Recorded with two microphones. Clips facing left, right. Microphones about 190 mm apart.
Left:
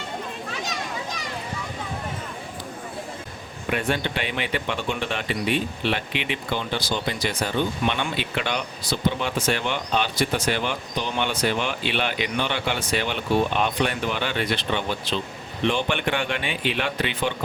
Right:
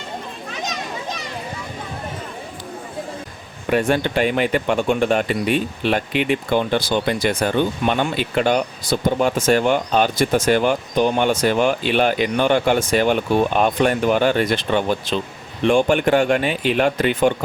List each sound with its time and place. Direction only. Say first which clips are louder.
0.6 s children playing: right 5 dB; 20° right (ahead or behind)
3.7 s speech: right 7 dB; 40° right (ahead or behind)